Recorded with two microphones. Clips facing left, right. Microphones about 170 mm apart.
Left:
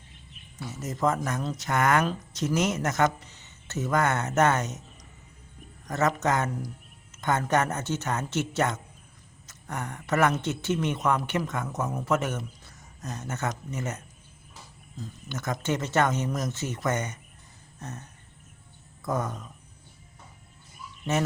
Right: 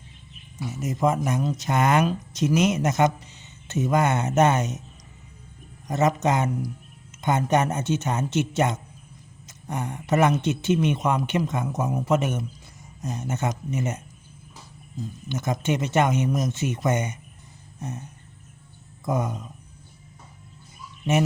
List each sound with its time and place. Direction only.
0.6 s speech: 15° right (ahead or behind)
5.9 s speech: 20° right (ahead or behind)
15.3 s speech: 20° right (ahead or behind)
17.7 s a sound: 15° right (ahead or behind)
19.0 s speech: 15° right (ahead or behind)